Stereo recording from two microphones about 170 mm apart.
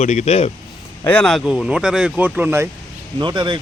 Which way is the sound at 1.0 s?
5° left (ahead or behind).